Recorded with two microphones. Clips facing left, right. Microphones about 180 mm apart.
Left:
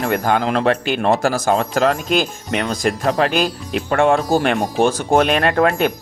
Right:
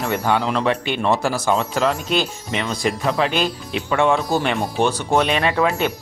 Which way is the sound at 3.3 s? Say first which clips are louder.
Left 3 dB; 5° left (ahead or behind).